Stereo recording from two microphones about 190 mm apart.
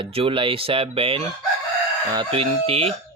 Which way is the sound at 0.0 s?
30° right (ahead or behind).